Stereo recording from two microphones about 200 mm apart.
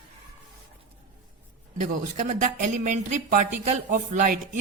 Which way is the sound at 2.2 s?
40° right (ahead or behind).